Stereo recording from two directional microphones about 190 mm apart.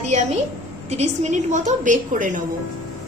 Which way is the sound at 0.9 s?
35° right (ahead or behind).